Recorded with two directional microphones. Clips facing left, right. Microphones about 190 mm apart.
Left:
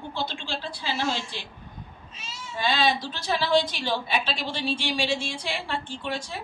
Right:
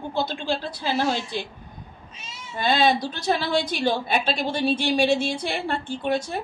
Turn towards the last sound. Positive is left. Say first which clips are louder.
# right 7 dB
turn(degrees=-50)  # may be behind; listen again after turning